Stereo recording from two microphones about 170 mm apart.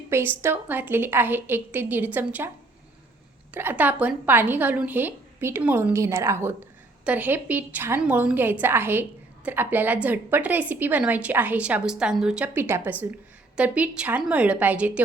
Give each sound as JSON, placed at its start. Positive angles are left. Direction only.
{"t": 0.1, "sound": "a woman's voice", "side_deg": -10}
{"t": 3.5, "sound": "a woman's voice", "side_deg": -10}